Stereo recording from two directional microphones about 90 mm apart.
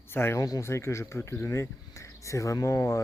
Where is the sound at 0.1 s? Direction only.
25° left (ahead or behind).